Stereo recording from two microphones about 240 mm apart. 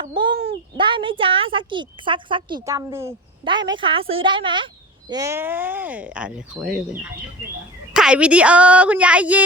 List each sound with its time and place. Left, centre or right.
0.0 s a sound: centre
0.4 s speech: right; by 6.7 s centre
7.9 s a woman's voice: centre